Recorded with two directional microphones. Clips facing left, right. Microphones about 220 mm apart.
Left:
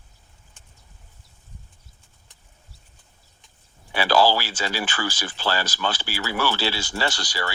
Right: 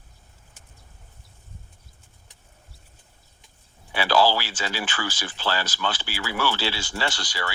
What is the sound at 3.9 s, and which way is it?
Speech, 40° left (ahead or behind).